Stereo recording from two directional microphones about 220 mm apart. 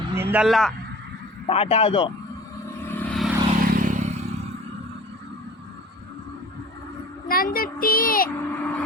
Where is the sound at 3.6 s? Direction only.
35° right (ahead or behind).